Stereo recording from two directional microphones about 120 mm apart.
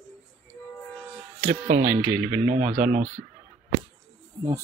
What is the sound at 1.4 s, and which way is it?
Speech, 90° right.